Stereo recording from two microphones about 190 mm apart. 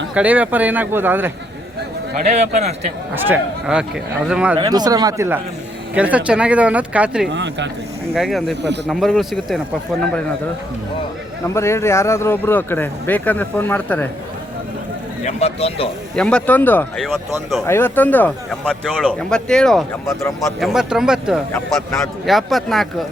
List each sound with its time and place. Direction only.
0.1 s speech: 5° right (ahead or behind)
2.2 s a man's voice: 35° right (ahead or behind)
3.2 s speech: 5° right (ahead or behind)
4.5 s a man's voice: 20° right (ahead or behind); by 7.3 s 5° right (ahead or behind)
7.3 s speech: 70° right (ahead or behind)
8.1 s speech: centre (ahead or behind)
11.4 s speech: 15° left (ahead or behind)
15.2 s speech: 35° left (ahead or behind)
16.1 s speech: 5° left (ahead or behind)